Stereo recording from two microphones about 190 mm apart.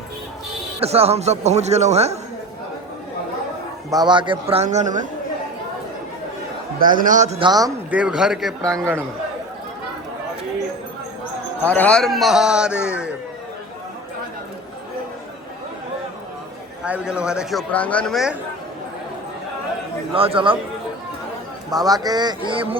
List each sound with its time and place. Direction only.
0.8 s speech: 30° right (ahead or behind)
3.8 s speech: 20° right (ahead or behind); by 5.0 s 40° right (ahead or behind)
6.7 s speech: 45° right (ahead or behind); by 7.7 s 20° right (ahead or behind)
7.9 s a man's voice: 5° right (ahead or behind)
11.6 s a man's voice: 10° left (ahead or behind)
16.8 s a man's voice: 5° right (ahead or behind)
20.1 s speech: 30° right (ahead or behind)
21.7 s speech: 20° right (ahead or behind)